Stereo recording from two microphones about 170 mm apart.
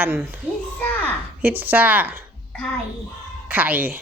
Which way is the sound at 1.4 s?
10° right (ahead or behind).